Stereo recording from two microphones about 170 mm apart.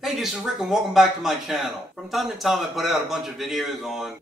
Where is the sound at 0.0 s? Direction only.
Centre (ahead or behind).